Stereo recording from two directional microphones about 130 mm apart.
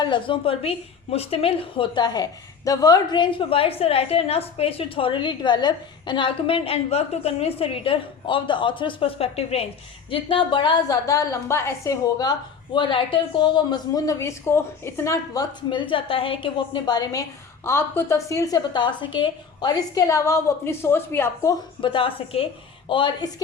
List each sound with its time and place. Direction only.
0.0 s a woman's voice: 40° left (ahead or behind); by 21.5 s 20° left (ahead or behind)
21.8 s a woman's voice: 40° left (ahead or behind)